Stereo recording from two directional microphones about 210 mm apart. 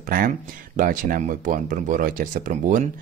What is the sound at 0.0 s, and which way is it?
Speech, 40° right (ahead or behind).